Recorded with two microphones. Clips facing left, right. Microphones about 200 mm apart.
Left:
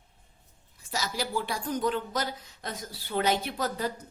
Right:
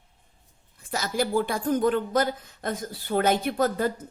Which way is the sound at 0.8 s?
55° right (ahead or behind).